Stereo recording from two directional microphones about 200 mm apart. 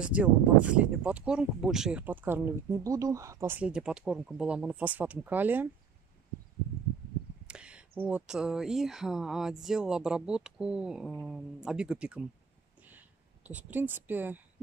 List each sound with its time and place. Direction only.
0.0 s speech: 5° right (ahead or behind)
7.4 s speech: 5° right (ahead or behind)
12.8 s a sound: 10° right (ahead or behind)